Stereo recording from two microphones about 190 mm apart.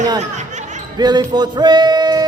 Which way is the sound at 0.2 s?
40° right (ahead or behind).